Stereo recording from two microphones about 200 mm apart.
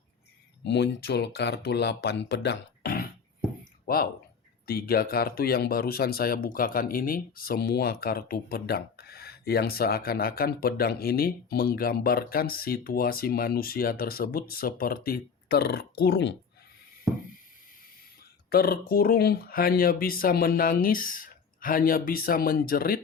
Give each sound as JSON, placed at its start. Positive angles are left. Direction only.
{"t": 0.6, "sound": "speech", "side_deg": 60}
{"t": 3.6, "sound": "a sound", "side_deg": 50}
{"t": 4.6, "sound": "speech", "side_deg": 50}
{"t": 18.5, "sound": "speech", "side_deg": 50}